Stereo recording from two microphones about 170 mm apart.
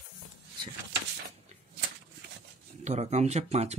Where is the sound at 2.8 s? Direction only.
40° right (ahead or behind).